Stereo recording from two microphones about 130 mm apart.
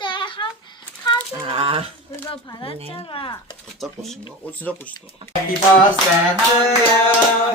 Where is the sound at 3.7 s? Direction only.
Centre (ahead or behind).